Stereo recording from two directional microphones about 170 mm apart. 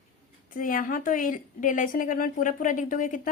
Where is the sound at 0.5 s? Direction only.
55° left (ahead or behind).